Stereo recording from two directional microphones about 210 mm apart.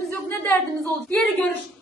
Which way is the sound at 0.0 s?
5° left (ahead or behind).